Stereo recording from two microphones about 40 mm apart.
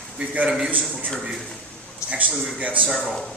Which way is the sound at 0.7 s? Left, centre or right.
Right.